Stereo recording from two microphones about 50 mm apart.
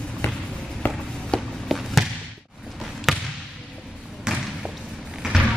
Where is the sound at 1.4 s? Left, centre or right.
Centre.